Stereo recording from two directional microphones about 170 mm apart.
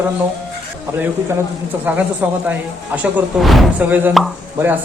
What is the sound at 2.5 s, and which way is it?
Speech, 10° right (ahead or behind).